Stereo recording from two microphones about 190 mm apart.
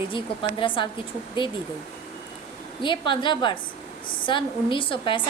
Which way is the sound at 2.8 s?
25° left (ahead or behind).